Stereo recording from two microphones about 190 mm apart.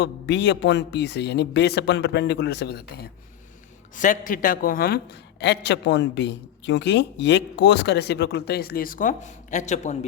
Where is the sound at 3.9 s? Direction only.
45° left (ahead or behind).